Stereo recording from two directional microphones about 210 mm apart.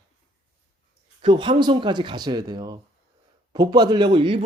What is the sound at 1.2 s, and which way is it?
A man's voice, 25° right (ahead or behind).